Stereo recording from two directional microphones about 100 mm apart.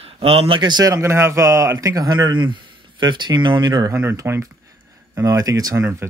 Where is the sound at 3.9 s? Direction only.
25° right (ahead or behind).